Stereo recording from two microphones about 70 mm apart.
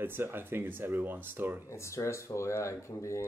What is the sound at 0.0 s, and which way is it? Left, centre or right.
Speech, right.